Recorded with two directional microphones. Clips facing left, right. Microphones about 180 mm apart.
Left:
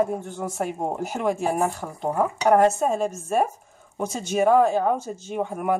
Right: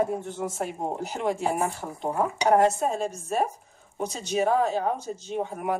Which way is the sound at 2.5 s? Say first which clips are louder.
Left 3 dB; 50° left (ahead or behind).